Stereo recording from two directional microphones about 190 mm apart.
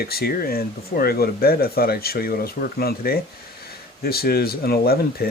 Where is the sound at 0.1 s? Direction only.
55° left (ahead or behind).